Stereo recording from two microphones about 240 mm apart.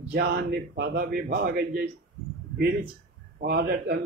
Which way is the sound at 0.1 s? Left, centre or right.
Right.